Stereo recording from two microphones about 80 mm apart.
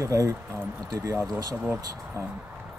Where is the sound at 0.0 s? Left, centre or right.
Right.